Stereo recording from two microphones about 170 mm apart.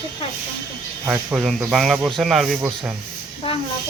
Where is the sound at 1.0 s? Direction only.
10° right (ahead or behind).